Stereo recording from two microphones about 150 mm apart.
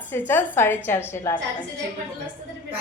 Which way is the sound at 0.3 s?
15° left (ahead or behind).